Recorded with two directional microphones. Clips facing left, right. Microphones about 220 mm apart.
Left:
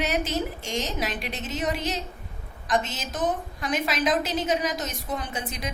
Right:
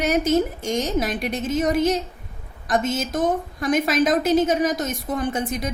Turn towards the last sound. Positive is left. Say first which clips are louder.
# right 9 dB
turn(degrees=-45)  # may be behind; listen again after turning